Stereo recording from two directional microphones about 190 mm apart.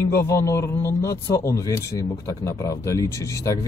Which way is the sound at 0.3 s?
15° left (ahead or behind).